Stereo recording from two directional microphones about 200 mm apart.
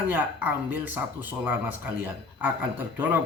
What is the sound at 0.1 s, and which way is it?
Speech, 10° right (ahead or behind).